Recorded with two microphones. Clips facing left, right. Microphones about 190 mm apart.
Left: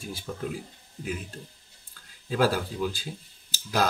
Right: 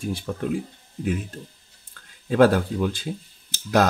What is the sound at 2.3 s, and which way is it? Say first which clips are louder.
Speech: right 8 dB; 55° right (ahead or behind).